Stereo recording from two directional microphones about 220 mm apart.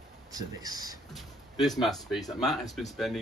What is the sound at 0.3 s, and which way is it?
Speech, 15° right (ahead or behind).